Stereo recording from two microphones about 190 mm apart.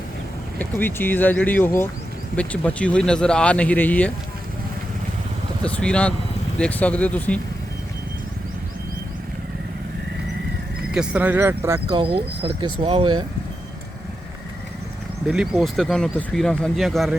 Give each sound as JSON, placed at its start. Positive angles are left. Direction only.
{"t": 0.6, "sound": "speech", "side_deg": 10}
{"t": 5.6, "sound": "speech", "side_deg": 5}
{"t": 10.9, "sound": "speech", "side_deg": -5}
{"t": 11.9, "sound": "speech", "side_deg": -25}
{"t": 15.3, "sound": "speech", "side_deg": -5}